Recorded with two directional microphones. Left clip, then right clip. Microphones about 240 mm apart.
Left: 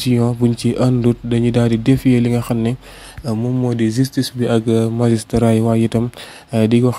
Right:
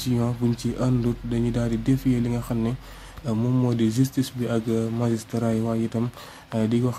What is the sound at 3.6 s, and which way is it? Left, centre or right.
Speech, centre.